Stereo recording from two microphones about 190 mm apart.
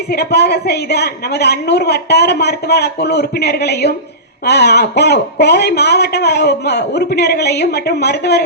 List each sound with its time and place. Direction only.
0.1 s speech: 60° left (ahead or behind)